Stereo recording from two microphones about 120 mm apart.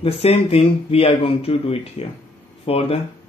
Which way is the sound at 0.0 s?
55° left (ahead or behind).